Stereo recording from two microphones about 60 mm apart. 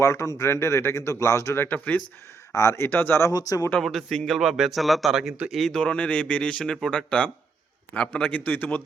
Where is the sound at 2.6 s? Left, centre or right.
Left.